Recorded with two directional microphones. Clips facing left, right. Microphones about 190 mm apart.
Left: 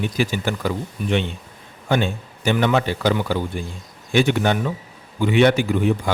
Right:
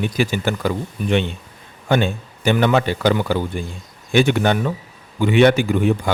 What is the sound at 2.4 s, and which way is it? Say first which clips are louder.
A man's voice: right 2 dB; 60° right (ahead or behind).